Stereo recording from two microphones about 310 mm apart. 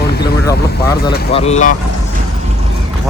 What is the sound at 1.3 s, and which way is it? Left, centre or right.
Speech, centre.